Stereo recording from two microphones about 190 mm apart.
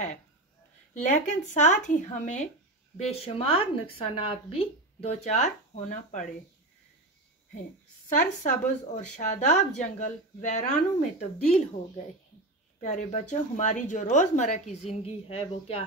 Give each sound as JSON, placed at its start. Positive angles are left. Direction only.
{"t": 0.9, "sound": "speech", "side_deg": 40}
{"t": 8.1, "sound": "speech", "side_deg": 40}
{"t": 12.8, "sound": "speech", "side_deg": 40}